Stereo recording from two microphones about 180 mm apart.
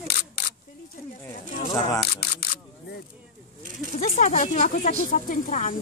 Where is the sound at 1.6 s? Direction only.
30° left (ahead or behind).